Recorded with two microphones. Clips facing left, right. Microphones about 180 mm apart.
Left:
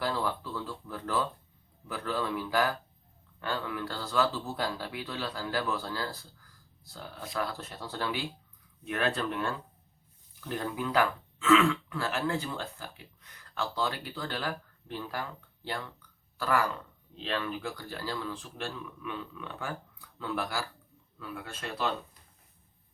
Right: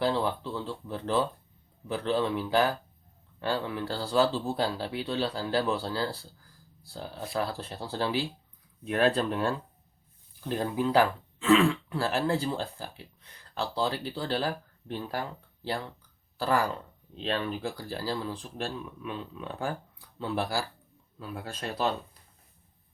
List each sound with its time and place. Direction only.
0.0 s speech: 25° right (ahead or behind)